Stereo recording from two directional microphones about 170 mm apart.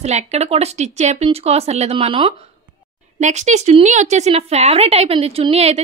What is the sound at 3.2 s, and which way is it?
A woman's voice, 45° right (ahead or behind).